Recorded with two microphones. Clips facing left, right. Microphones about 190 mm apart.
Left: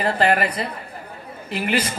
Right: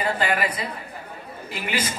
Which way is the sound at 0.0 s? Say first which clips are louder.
Left 4 dB; 60° left (ahead or behind).